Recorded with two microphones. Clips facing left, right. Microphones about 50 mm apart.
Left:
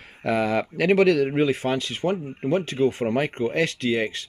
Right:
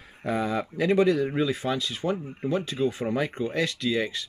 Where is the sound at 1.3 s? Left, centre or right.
Left.